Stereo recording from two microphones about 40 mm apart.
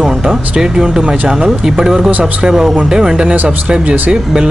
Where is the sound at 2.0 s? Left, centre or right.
Right.